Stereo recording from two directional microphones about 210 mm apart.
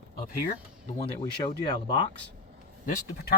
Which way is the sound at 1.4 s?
20° left (ahead or behind).